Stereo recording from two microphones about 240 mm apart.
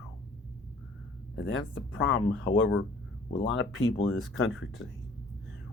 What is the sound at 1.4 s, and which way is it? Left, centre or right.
Speech, left.